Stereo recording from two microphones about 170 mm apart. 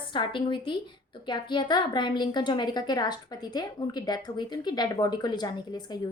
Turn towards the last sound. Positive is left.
turn(degrees=25)  # may be behind; listen again after turning